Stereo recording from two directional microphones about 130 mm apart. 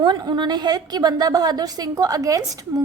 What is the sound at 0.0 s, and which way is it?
A woman's voice, 35° right (ahead or behind).